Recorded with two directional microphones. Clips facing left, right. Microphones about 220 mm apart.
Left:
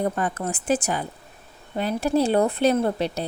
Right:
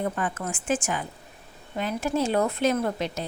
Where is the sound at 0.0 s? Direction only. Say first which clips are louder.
Left 4 dB; 40° left (ahead or behind).